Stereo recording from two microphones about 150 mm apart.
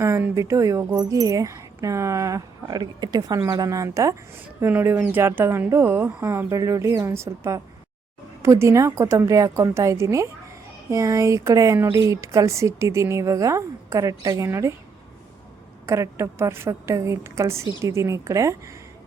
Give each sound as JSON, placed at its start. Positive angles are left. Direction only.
{"t": 0.0, "sound": "speech", "side_deg": -20}
{"t": 15.9, "sound": "speech", "side_deg": -20}